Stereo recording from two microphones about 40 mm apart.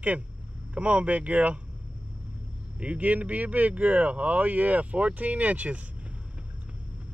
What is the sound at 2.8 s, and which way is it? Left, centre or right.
Speech, right.